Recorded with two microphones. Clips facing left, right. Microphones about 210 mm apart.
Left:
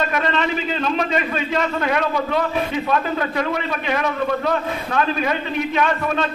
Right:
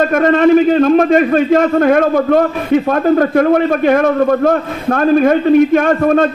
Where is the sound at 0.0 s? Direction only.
50° right (ahead or behind).